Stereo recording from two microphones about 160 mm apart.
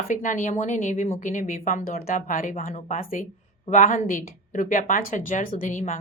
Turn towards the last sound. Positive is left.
turn(degrees=55)  # may be behind; listen again after turning